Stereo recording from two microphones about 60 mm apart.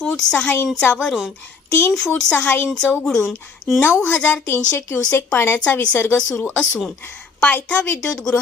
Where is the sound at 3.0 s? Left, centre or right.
Centre.